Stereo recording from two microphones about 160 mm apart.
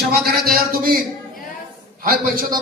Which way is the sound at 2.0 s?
65° right (ahead or behind).